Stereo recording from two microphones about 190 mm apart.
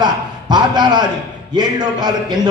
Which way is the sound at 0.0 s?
20° right (ahead or behind).